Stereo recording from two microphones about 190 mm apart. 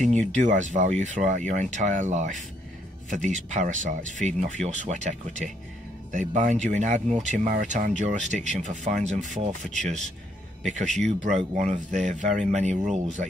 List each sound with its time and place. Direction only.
0.0 s speech: 40° right (ahead or behind)
11.2 s speech: 40° right (ahead or behind)